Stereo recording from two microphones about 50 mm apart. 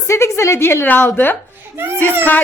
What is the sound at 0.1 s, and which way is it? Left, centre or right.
Speech, left.